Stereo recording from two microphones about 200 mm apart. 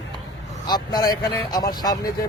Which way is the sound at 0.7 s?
20° left (ahead or behind).